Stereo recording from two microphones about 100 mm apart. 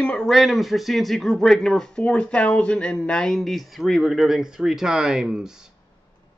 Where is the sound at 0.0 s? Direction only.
5° left (ahead or behind).